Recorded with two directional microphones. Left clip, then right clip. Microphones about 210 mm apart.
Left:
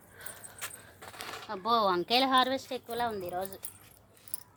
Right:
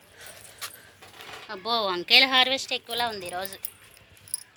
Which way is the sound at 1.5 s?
40° left (ahead or behind).